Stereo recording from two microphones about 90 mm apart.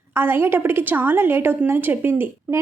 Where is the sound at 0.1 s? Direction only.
25° right (ahead or behind).